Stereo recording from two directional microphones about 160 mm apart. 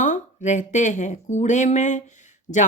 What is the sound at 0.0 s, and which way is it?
Speech, 50° left (ahead or behind).